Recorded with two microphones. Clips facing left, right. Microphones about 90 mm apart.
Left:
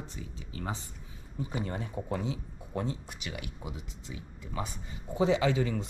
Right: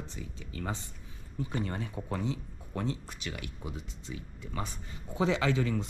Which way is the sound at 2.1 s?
10° left (ahead or behind).